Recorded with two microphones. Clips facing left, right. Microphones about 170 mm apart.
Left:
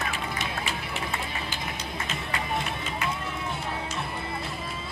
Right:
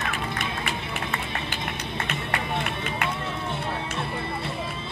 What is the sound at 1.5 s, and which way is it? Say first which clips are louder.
Music: right 2 dB; 65° right (ahead or behind).